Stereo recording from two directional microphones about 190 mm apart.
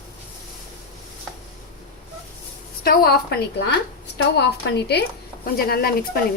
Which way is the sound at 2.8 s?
55° left (ahead or behind).